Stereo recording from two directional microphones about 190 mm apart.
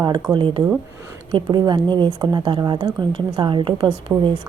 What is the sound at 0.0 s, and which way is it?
A woman's voice, 20° right (ahead or behind).